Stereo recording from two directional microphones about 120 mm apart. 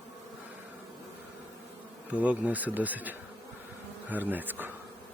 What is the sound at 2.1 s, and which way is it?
Speech, 10° right (ahead or behind).